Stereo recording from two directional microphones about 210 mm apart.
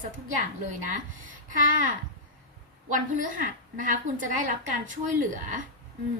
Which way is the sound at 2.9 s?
40° right (ahead or behind).